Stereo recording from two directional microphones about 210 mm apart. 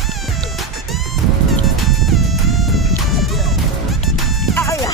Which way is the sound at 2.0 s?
Centre (ahead or behind).